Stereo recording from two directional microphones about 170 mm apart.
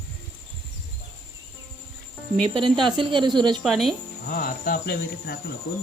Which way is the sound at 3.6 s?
Centre (ahead or behind).